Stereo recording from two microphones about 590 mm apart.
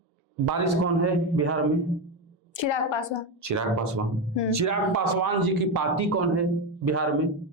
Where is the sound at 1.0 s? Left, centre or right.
Right.